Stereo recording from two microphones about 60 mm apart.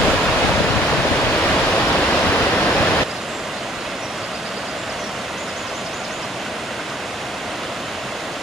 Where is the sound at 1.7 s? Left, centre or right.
Centre.